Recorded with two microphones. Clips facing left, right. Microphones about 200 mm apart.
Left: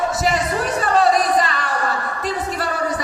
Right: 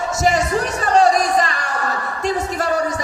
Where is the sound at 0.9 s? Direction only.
45° right (ahead or behind).